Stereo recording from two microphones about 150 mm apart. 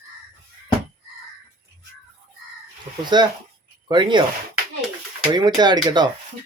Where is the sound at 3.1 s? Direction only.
30° right (ahead or behind).